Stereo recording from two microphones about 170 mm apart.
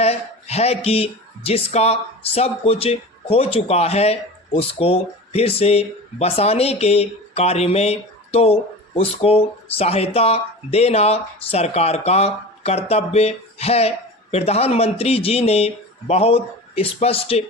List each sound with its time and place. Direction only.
0.0 s speech: 40° left (ahead or behind)